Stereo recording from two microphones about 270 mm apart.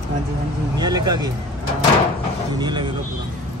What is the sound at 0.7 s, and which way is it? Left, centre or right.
Speech, centre.